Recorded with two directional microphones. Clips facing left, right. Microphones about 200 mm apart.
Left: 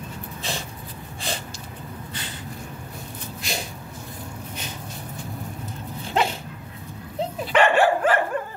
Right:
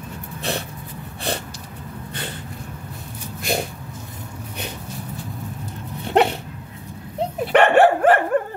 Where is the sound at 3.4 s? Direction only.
55° right (ahead or behind).